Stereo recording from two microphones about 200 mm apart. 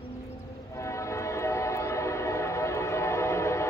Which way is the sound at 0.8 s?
15° left (ahead or behind).